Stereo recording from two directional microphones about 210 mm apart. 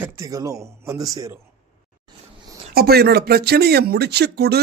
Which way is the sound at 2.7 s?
45° right (ahead or behind).